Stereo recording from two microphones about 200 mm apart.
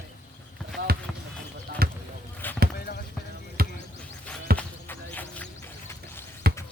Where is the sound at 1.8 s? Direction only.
50° right (ahead or behind).